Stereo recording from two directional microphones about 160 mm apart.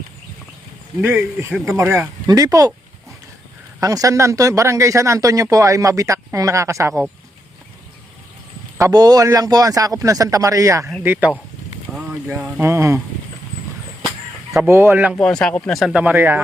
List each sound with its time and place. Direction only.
1.0 s speech: 10° right (ahead or behind)
3.8 s speech: 20° right (ahead or behind)
8.8 s speech: 25° right (ahead or behind)
11.9 s vehicle: 5° right (ahead or behind)
12.3 s speech: 15° right (ahead or behind)
14.7 s speech: 15° right (ahead or behind)
15.1 s speech: 5° left (ahead or behind); by 16.4 s 15° right (ahead or behind)